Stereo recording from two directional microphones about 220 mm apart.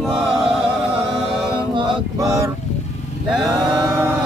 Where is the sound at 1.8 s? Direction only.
20° right (ahead or behind).